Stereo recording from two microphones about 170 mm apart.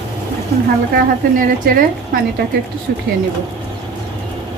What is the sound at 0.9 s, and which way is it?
Speech, 55° right (ahead or behind).